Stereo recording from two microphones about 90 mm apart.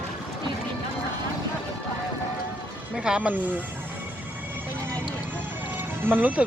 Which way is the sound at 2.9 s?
10° right (ahead or behind).